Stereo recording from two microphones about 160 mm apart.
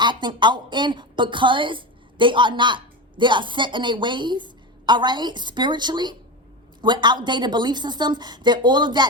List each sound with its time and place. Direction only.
0.0 s a woman's voice: 30° right (ahead or behind)